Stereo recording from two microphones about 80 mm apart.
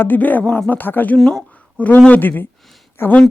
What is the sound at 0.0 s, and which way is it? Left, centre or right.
Speech, left.